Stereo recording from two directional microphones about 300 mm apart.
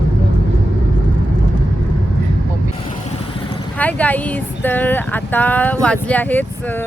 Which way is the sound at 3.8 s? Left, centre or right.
Centre.